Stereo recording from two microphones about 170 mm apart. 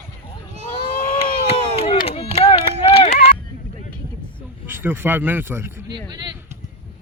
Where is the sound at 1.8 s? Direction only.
35° left (ahead or behind).